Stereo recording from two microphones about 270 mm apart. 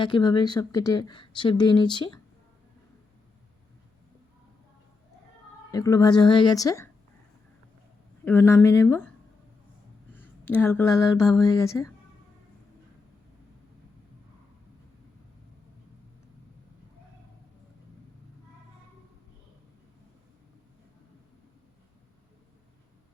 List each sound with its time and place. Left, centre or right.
0.0 s speech: centre
5.7 s speech: centre
8.2 s speech: centre
10.1 s speech: centre